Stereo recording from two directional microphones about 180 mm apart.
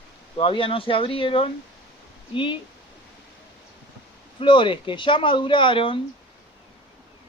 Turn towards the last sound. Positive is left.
turn(degrees=30)  # may be behind; listen again after turning